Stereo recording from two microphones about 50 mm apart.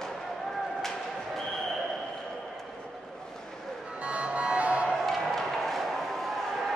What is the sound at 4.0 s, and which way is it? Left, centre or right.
Music, right.